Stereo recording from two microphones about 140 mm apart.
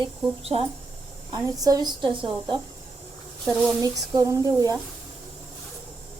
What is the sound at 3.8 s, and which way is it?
Speech, 25° right (ahead or behind).